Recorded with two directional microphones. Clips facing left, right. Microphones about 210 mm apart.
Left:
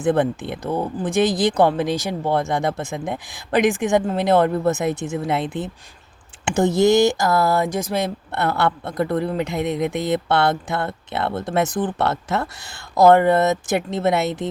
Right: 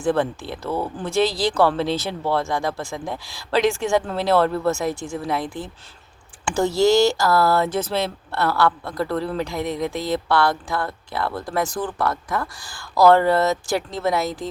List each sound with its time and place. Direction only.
0.0 s speech: 20° left (ahead or behind)